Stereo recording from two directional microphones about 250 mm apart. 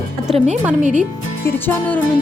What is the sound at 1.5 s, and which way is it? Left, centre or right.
Speech, centre.